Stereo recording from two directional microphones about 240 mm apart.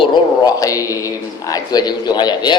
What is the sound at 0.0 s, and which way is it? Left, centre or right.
A man's voice, centre.